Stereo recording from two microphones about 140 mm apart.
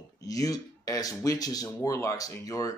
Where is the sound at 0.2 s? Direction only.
25° left (ahead or behind).